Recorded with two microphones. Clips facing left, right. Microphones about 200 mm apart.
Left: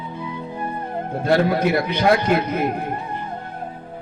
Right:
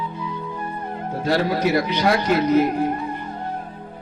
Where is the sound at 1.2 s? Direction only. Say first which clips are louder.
Left 2 dB; 55° left (ahead or behind).